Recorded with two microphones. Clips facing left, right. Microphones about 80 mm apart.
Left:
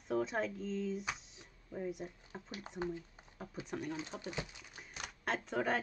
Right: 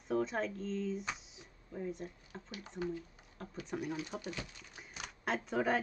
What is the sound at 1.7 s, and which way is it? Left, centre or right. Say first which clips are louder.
Speech: even; centre.